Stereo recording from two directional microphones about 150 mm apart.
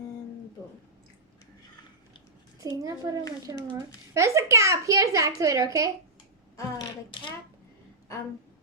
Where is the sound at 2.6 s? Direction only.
25° right (ahead or behind).